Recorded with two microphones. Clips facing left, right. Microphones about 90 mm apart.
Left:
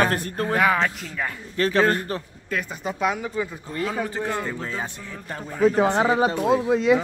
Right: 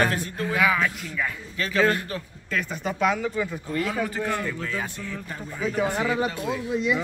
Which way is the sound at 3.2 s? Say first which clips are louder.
Right 1 dB; 20° left (ahead or behind).